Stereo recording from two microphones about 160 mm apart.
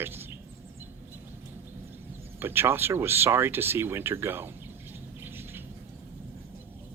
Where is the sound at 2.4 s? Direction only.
15° right (ahead or behind).